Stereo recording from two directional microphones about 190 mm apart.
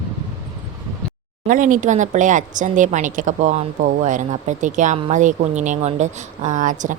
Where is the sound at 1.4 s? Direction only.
45° right (ahead or behind).